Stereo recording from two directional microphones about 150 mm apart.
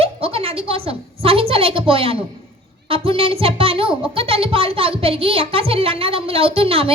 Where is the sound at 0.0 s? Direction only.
40° right (ahead or behind).